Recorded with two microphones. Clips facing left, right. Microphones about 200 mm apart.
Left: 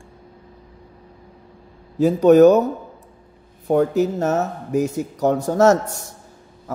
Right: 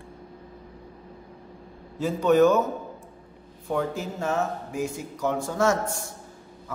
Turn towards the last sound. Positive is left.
turn(degrees=40)  # may be behind; listen again after turning